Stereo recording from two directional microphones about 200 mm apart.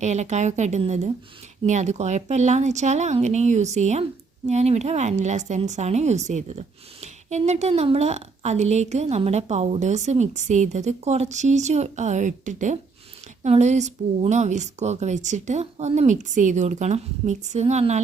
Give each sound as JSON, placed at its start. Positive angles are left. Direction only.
{"t": 0.0, "sound": "speech", "side_deg": -35}